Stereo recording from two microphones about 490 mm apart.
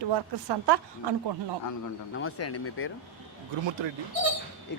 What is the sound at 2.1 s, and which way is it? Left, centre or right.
Speech, left.